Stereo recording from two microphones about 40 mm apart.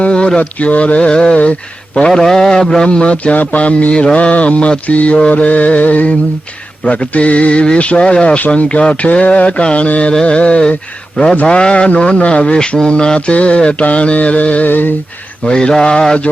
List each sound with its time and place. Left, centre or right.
0.0 s speech: left
2.0 s speech: centre
3.3 s music: left
6.8 s speech: left
8.4 s music: left
10.1 s speech: left
13.8 s music: left
15.4 s speech: left